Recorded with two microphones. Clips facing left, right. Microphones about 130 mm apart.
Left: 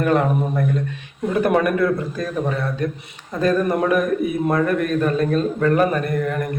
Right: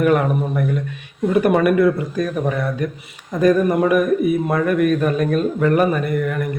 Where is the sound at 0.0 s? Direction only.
10° right (ahead or behind).